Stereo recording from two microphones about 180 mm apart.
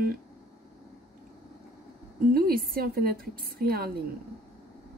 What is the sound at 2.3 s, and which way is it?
Speech, 55° right (ahead or behind).